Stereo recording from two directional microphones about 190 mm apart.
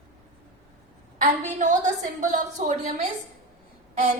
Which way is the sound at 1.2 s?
40° right (ahead or behind).